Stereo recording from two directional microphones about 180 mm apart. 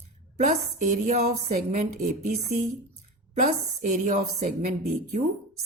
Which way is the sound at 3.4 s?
45° right (ahead or behind).